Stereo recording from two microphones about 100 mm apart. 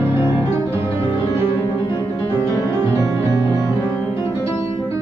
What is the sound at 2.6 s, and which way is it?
Music, 30° right (ahead or behind).